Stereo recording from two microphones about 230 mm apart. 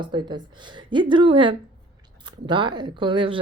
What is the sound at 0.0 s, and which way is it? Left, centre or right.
Speech, centre.